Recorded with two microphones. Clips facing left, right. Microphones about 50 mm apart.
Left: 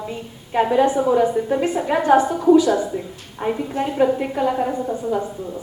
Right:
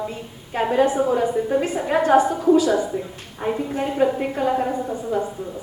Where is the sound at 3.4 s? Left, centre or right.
Centre.